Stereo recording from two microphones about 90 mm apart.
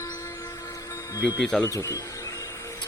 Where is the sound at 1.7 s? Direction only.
35° left (ahead or behind).